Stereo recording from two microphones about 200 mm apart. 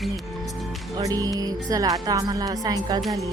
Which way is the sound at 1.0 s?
20° right (ahead or behind).